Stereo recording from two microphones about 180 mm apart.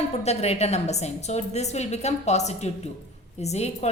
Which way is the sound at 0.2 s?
35° left (ahead or behind).